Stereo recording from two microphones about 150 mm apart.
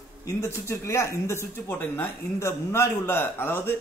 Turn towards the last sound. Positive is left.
turn(degrees=15)  # may be behind; listen again after turning